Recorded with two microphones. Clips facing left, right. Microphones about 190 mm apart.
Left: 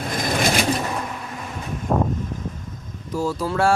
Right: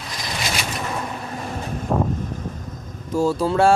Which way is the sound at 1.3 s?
35° right (ahead or behind).